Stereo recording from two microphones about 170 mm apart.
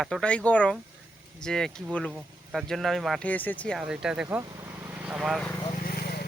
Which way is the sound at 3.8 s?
5° right (ahead or behind).